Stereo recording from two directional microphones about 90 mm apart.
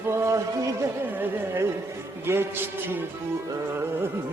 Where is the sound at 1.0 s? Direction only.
20° right (ahead or behind).